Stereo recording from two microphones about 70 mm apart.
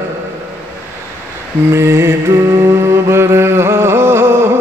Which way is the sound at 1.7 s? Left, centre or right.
Right.